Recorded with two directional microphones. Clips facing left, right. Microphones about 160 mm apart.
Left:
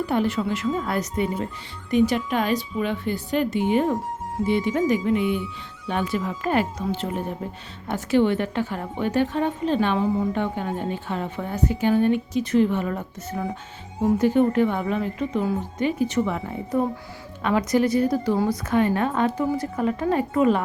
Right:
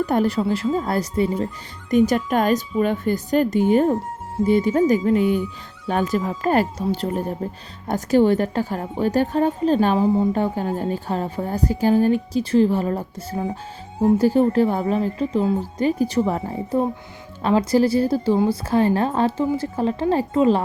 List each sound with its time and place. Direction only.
0.0 s a woman's voice: 45° right (ahead or behind)
1.9 s a woman's voice: 45° right (ahead or behind); by 20.6 s 30° right (ahead or behind)